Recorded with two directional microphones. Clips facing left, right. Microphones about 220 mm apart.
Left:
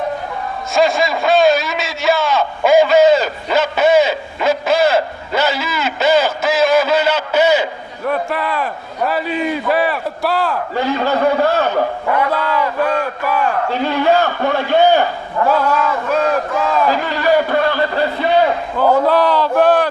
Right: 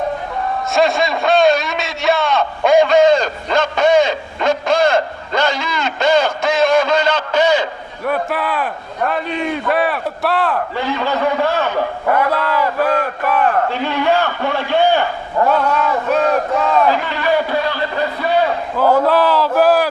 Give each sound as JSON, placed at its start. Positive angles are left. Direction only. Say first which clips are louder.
{"t": 0.7, "sound": "a sound", "louder": "left 1 dB", "side_deg": 0}
{"t": 8.1, "sound": "a man's voice", "louder": "even", "side_deg": 0}
{"t": 10.8, "sound": "a man's voice", "louder": "left 6 dB", "side_deg": 40}
{"t": 12.3, "sound": "a man's voice", "louder": "even", "side_deg": 0}
{"t": 13.8, "sound": "a man's voice", "louder": "left 5 dB", "side_deg": 40}
{"t": 15.4, "sound": "a man's voice", "louder": "left 2 dB", "side_deg": 0}
{"t": 16.9, "sound": "a man's voice", "louder": "left 2 dB", "side_deg": 40}
{"t": 18.8, "sound": "a man's voice", "louder": "even", "side_deg": -5}